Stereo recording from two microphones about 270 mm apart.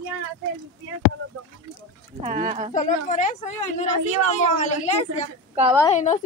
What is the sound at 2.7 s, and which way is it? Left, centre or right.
Speech, left.